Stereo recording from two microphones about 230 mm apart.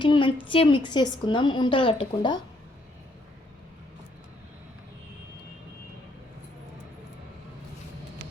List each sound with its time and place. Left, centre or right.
0.0 s a woman's voice: left